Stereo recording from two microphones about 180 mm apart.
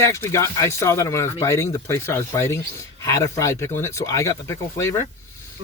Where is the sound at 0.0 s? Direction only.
15° left (ahead or behind).